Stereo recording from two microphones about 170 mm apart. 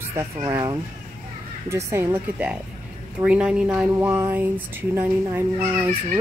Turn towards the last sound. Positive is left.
turn(degrees=-15)  # may be behind; listen again after turning